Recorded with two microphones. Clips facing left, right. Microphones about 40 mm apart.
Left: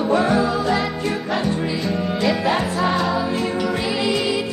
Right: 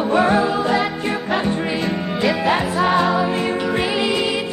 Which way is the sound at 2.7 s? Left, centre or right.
Centre.